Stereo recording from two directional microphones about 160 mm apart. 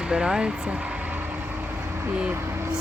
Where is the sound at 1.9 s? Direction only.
10° right (ahead or behind).